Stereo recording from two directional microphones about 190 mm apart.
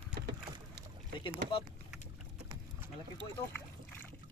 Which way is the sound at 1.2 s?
30° left (ahead or behind).